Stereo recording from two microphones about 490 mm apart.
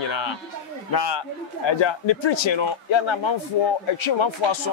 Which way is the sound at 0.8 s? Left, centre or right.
Left.